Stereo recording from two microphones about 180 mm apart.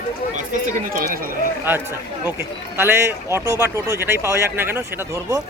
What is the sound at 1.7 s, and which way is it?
Speech, 10° right (ahead or behind).